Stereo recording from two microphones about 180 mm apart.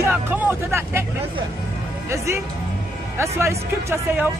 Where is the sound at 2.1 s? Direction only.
15° right (ahead or behind).